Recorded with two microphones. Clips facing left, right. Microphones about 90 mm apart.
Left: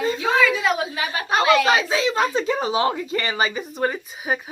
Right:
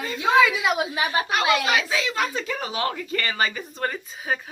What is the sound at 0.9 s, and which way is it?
Speech, 25° right (ahead or behind).